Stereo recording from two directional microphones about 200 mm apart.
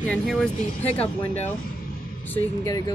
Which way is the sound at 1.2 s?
35° left (ahead or behind).